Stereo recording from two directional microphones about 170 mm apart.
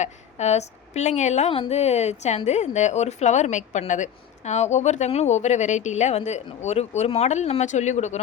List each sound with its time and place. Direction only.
0.0 s a woman's voice: 40° left (ahead or behind)